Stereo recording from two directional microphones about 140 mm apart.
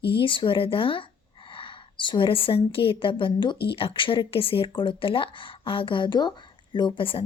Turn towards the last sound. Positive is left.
turn(degrees=40)  # may be behind; listen again after turning